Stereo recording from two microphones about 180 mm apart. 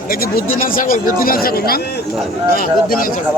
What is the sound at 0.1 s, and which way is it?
Speech, 55° left (ahead or behind).